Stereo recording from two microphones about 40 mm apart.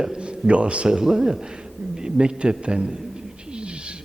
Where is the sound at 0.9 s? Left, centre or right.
Centre.